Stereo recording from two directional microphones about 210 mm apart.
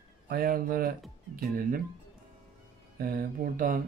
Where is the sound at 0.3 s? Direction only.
45° right (ahead or behind).